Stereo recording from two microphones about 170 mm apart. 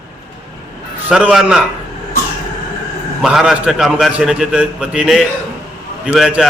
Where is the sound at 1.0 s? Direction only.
5° right (ahead or behind).